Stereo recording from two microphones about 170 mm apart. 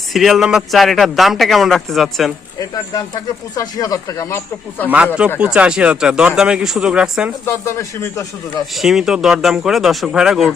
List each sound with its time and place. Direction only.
0.1 s speech: centre (ahead or behind)
2.6 s speech: 25° left (ahead or behind)
5.4 s speech: 5° right (ahead or behind)
7.4 s speech: 15° left (ahead or behind)
8.7 s speech: centre (ahead or behind)